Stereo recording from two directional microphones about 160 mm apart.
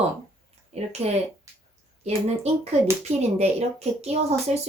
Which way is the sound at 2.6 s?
40° right (ahead or behind).